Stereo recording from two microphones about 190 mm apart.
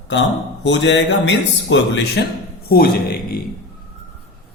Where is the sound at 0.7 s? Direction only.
70° left (ahead or behind).